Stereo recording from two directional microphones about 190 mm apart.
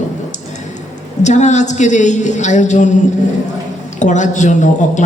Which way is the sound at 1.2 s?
40° left (ahead or behind).